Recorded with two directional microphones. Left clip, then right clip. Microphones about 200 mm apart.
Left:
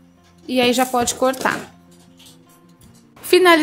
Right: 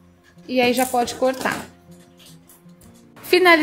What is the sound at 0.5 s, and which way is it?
A woman's voice, 15° left (ahead or behind).